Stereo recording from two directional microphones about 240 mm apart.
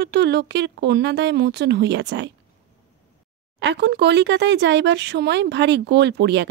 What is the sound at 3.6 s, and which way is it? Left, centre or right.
A woman's voice, right.